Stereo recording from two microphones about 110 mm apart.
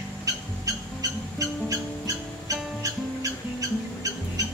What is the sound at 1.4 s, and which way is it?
Music, 30° right (ahead or behind).